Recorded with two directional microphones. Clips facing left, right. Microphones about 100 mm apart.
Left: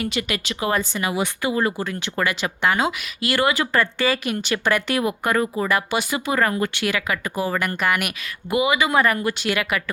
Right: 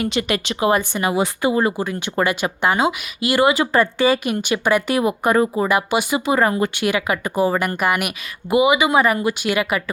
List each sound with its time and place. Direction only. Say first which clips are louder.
0.0 s speech: right 4 dB; 30° right (ahead or behind)
0.7 s speech: right 3 dB; 15° right (ahead or behind)
1.0 s speech: right 5 dB; 30° right (ahead or behind)
2.7 s speech: right 3 dB; 15° right (ahead or behind)
8.4 s speech: right 5 dB; 20° right (ahead or behind)